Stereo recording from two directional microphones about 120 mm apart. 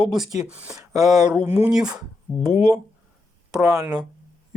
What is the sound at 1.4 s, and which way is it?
Speech, 25° right (ahead or behind).